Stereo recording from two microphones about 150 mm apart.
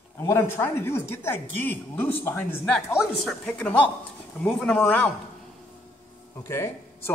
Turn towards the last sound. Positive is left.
turn(degrees=15)  # may be behind; listen again after turning